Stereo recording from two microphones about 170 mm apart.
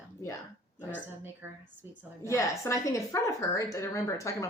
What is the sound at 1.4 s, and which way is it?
Speech, 15° right (ahead or behind).